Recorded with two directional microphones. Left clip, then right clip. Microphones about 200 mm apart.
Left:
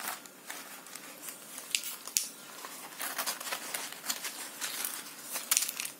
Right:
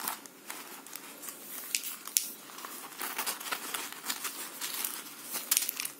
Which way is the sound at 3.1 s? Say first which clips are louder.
Even; centre (ahead or behind).